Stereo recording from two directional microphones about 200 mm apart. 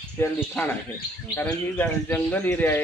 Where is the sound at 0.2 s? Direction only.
10° left (ahead or behind).